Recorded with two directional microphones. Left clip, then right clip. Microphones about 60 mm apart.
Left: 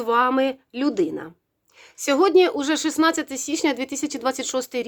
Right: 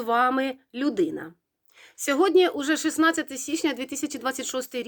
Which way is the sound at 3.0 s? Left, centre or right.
Left.